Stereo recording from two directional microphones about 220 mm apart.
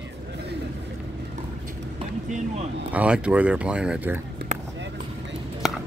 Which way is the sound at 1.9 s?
30° right (ahead or behind).